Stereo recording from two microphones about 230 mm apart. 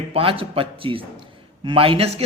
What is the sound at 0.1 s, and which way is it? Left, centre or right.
A man's voice, right.